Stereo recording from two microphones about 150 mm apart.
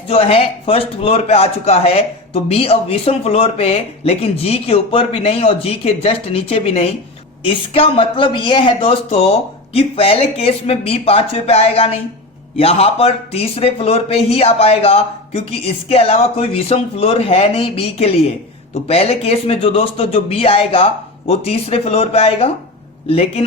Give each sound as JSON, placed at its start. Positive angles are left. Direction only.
{"t": 0.1, "sound": "a man's voice", "side_deg": 40}